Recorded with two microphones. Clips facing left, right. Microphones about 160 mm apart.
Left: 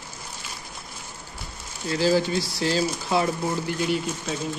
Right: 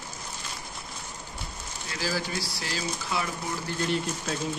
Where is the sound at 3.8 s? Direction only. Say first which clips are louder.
Left 3 dB; 5° left (ahead or behind).